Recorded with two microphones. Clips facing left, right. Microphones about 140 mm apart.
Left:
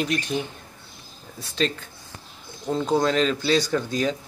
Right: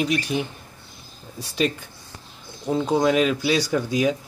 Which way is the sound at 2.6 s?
10° right (ahead or behind).